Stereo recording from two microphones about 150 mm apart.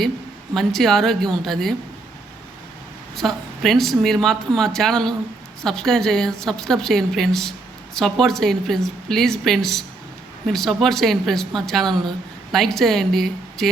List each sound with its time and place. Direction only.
0.5 s speech: centre (ahead or behind)
3.2 s speech: centre (ahead or behind)